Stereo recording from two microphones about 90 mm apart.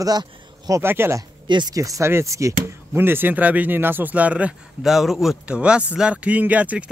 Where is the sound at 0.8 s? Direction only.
25° right (ahead or behind).